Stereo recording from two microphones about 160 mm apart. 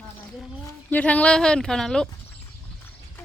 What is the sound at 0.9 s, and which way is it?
Speech, 10° left (ahead or behind).